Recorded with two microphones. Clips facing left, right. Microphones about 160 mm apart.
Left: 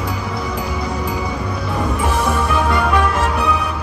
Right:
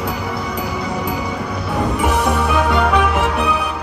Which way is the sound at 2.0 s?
20° right (ahead or behind).